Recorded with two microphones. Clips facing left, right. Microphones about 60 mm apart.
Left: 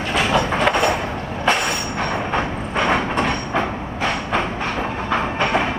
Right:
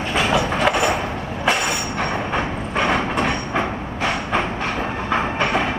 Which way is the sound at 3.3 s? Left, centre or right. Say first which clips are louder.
Even; centre.